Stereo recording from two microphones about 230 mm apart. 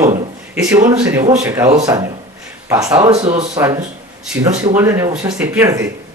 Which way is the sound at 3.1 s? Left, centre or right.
Right.